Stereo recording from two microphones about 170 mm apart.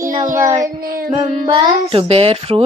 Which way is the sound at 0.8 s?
55° right (ahead or behind).